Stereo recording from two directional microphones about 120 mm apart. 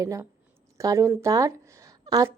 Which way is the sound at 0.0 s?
30° right (ahead or behind).